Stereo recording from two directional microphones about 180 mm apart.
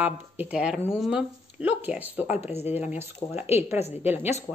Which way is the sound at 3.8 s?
35° left (ahead or behind).